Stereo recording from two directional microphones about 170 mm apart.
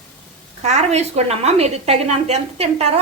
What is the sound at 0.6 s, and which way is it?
A woman's voice, 40° right (ahead or behind).